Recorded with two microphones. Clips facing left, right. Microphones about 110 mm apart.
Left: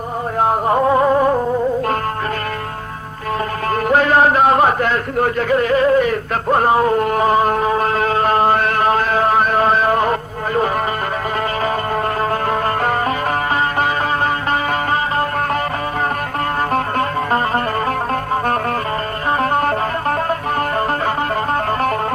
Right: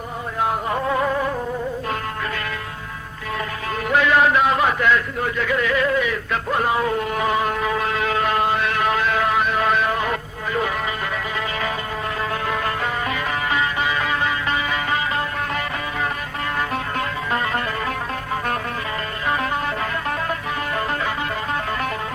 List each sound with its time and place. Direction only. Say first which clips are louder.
0.3 s music: left 7 dB; 40° left (ahead or behind)
3.7 s a sound: left 4 dB; 45° left (ahead or behind)
12.2 s music: left 6 dB; 45° left (ahead or behind)
16.7 s music: left 7 dB; 40° left (ahead or behind)
19.4 s music: left 7 dB; 50° left (ahead or behind)